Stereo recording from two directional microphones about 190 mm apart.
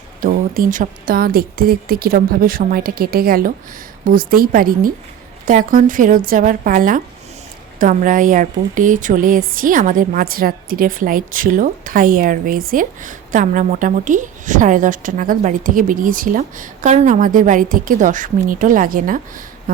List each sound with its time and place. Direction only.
0.2 s speech: 45° right (ahead or behind)